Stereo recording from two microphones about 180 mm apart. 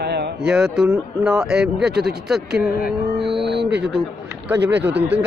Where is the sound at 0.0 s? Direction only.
65° right (ahead or behind).